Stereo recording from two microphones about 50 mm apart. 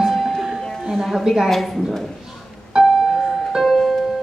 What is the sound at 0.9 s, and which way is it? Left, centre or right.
Speech, centre.